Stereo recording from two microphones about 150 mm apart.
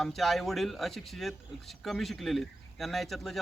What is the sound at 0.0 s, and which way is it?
Speech, centre (ahead or behind).